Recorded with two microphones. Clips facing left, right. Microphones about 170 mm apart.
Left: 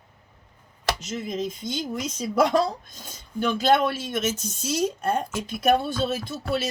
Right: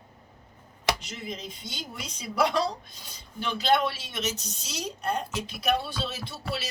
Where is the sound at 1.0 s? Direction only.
45° left (ahead or behind).